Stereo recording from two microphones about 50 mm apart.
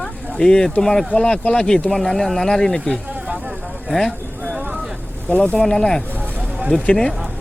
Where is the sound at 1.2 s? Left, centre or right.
Centre.